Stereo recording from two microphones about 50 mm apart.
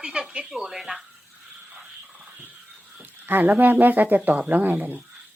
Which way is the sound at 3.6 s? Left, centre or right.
Right.